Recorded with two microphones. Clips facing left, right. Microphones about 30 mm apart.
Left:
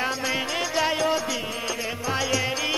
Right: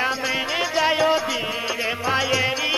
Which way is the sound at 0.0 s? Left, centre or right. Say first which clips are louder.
Right 3 dB; centre.